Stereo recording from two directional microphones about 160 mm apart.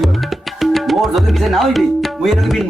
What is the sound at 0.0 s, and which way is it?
Music, centre (ahead or behind).